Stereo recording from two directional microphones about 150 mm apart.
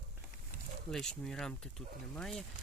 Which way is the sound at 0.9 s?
5° left (ahead or behind).